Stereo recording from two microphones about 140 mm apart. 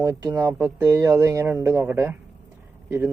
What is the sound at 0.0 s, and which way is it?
A man's voice, 25° right (ahead or behind).